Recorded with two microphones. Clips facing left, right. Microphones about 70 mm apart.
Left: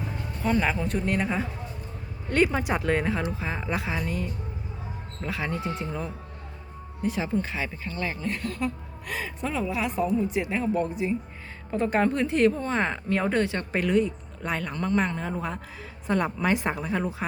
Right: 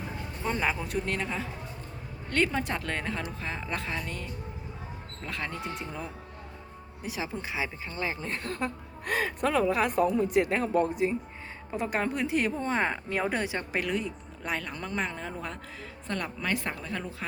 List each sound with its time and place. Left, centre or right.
0.6 s speech: centre
1.0 s speech: centre
7.9 s speech: right
8.3 s speech: right
9.0 s speech: right
11.7 s speech: centre
16.0 s a woman's voice: centre